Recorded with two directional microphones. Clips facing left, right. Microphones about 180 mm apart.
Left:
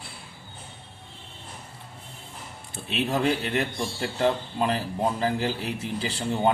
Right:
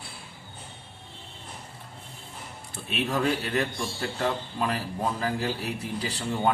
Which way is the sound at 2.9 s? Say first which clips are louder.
Left 2 dB; 25° left (ahead or behind).